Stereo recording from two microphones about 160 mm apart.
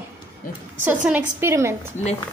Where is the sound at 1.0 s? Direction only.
10° right (ahead or behind).